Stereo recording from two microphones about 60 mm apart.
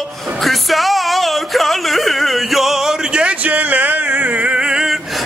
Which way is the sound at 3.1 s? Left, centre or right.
Right.